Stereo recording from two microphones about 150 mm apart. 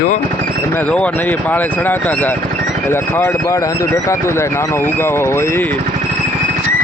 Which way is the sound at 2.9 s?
20° left (ahead or behind).